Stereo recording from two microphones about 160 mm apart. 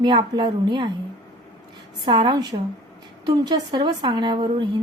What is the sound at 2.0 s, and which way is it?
A woman's voice, 30° right (ahead or behind).